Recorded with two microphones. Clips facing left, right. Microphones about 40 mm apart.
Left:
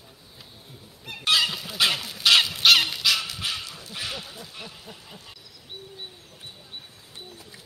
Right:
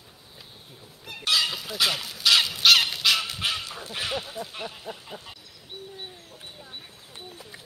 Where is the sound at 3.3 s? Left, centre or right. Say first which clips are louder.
Right 2 dB; right.